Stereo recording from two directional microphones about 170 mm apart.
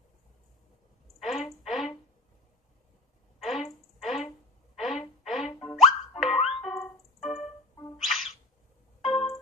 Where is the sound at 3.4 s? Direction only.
Centre (ahead or behind).